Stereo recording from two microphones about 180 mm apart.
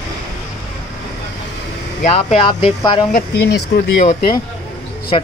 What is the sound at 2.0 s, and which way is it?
Speech, 35° left (ahead or behind).